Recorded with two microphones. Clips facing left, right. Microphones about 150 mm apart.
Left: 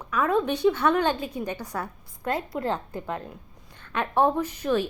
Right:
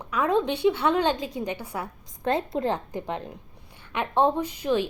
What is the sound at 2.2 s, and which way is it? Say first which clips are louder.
A woman's voice: right 3 dB; 25° right (ahead or behind).